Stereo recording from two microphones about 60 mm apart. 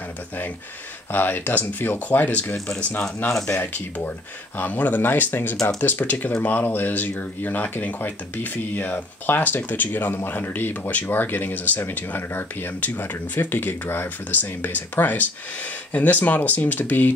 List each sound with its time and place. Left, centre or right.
1.1 s speech: left